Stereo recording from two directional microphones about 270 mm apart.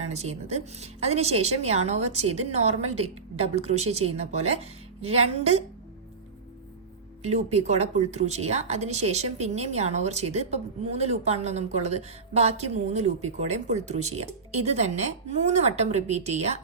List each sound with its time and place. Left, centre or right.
0.0 s speech: right
7.2 s speech: right